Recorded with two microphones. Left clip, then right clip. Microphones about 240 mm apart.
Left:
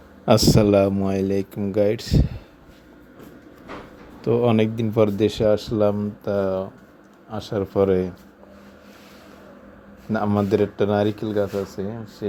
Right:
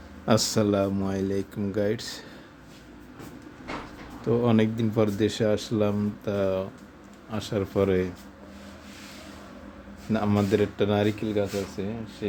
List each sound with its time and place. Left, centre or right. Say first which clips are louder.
0.3 s speech: left 7 dB; left
4.2 s speech: left 5 dB; left
10.1 s speech: left 4 dB; centre